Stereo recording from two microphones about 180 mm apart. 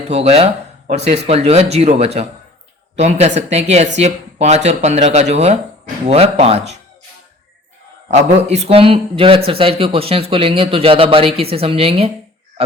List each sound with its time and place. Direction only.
0.1 s speech: 35° right (ahead or behind)
8.0 s speech: 40° right (ahead or behind)